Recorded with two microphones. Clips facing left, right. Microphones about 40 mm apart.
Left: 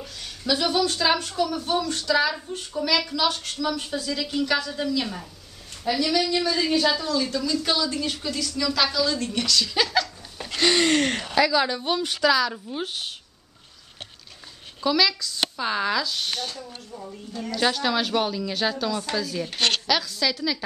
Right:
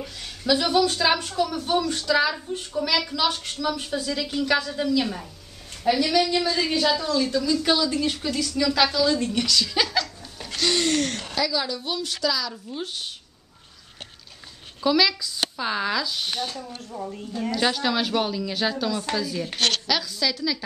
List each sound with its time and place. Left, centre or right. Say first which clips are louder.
0.2 s a woman's voice: right 2 dB; centre
10.6 s a sound: left 3 dB; left
11.0 s a woman's voice: left 4 dB; left
14.8 s a woman's voice: right 1 dB; centre
16.9 s speech: right 5 dB; right
17.5 s a woman's voice: even; centre